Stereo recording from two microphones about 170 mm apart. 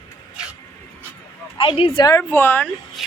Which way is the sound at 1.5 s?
30° left (ahead or behind).